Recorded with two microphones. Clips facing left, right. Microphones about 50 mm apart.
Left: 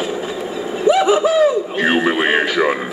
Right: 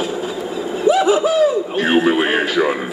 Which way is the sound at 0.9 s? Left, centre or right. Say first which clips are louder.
Left 1 dB; left.